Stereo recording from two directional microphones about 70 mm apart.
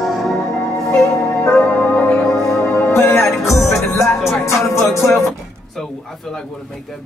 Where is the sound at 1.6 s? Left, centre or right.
Left.